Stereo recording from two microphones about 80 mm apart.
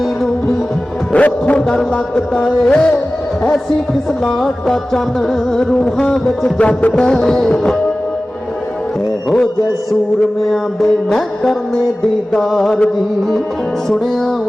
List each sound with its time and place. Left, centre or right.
1.1 s a man's voice: centre
1.6 s music: centre
2.3 s music: centre
4.2 s music: centre
10.5 s music: centre
13.9 s music: centre